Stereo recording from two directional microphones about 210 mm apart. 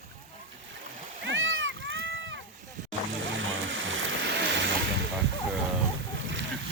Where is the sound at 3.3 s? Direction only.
65° right (ahead or behind).